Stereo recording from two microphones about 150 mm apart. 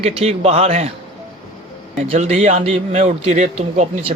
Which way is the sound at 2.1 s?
50° right (ahead or behind).